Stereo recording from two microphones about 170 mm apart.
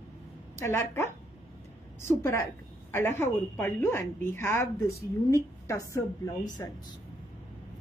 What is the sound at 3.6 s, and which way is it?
A woman's voice, 15° left (ahead or behind).